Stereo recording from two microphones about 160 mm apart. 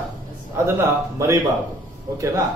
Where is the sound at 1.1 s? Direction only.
20° right (ahead or behind).